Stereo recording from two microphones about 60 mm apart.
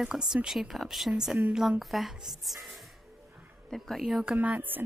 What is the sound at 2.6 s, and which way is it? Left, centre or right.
Music, centre.